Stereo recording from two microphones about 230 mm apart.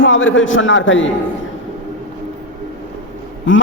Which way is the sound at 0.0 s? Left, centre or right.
Left.